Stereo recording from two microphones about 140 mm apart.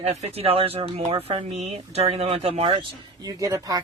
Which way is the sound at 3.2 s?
25° right (ahead or behind).